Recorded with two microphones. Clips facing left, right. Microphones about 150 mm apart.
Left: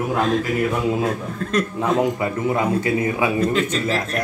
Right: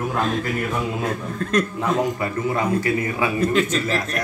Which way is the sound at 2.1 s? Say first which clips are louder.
Left 2 dB; 15° left (ahead or behind).